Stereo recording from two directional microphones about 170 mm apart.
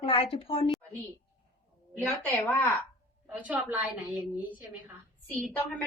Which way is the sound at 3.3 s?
10° right (ahead or behind).